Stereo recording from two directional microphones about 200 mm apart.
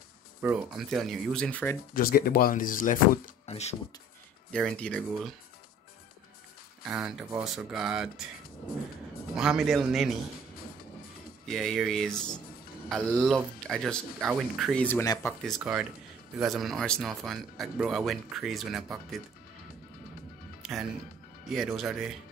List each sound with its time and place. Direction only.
0.4 s speech: 10° right (ahead or behind); by 1.8 s 10° left (ahead or behind)
2.0 s speech: 50° left (ahead or behind); by 3.7 s 35° left (ahead or behind)
4.5 s speech: 5° left (ahead or behind)
6.9 s speech: centre (ahead or behind)
9.4 s speech: 5° right (ahead or behind)
11.4 s speech: centre (ahead or behind)
15.4 s speech: centre (ahead or behind)
20.6 s music: centre (ahead or behind)
21.7 s speech: centre (ahead or behind)